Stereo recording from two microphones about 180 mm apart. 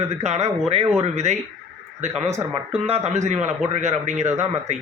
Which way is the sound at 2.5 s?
35° right (ahead or behind).